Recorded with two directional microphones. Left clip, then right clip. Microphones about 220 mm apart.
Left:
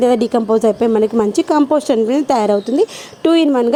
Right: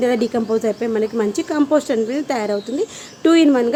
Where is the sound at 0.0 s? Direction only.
30° left (ahead or behind).